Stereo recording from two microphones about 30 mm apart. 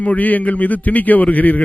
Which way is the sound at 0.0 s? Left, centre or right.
Left.